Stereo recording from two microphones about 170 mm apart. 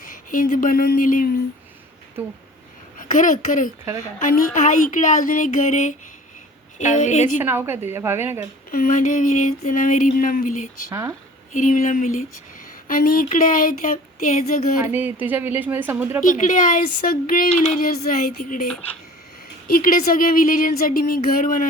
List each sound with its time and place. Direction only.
0.0 s speech: 50° left (ahead or behind)
3.0 s a child's voice: 50° left (ahead or behind)
7.4 s speech: 15° right (ahead or behind)
8.7 s speech: 55° left (ahead or behind)
14.9 s speech: 10° right (ahead or behind)
16.2 s speech: 50° left (ahead or behind)